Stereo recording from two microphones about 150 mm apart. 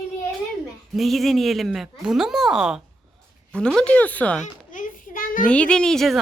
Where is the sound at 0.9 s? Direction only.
Centre (ahead or behind).